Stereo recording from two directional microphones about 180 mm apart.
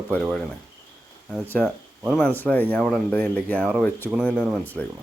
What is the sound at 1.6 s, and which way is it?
Speech, centre (ahead or behind).